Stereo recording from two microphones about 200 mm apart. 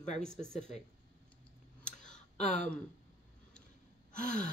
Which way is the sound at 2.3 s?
35° left (ahead or behind).